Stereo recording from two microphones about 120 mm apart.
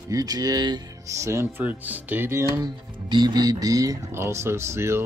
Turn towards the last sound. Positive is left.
turn(degrees=-20)  # may be behind; listen again after turning